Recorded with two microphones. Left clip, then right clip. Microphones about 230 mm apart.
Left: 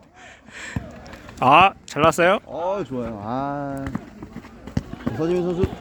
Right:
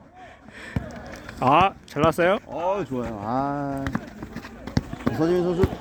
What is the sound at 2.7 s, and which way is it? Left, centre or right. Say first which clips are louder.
Speech: right 1 dB; left.